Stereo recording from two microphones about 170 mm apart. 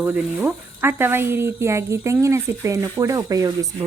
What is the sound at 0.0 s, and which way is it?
Speech, 10° right (ahead or behind).